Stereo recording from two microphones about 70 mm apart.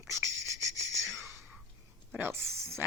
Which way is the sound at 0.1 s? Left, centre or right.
Right.